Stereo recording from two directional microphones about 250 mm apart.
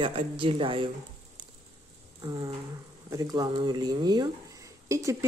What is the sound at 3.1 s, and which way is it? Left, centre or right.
Speech, centre.